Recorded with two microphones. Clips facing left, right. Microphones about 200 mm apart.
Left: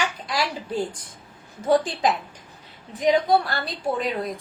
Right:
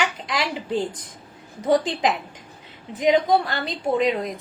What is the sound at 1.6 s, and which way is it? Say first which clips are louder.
Speech: right 1 dB; 20° right (ahead or behind).